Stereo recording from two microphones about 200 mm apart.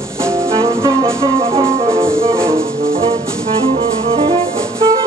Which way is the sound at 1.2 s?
25° right (ahead or behind).